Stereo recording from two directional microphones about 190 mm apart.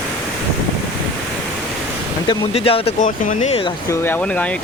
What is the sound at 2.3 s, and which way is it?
Speech, 30° left (ahead or behind).